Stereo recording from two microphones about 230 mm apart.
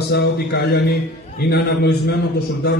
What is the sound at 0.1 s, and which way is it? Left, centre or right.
A man's voice, left.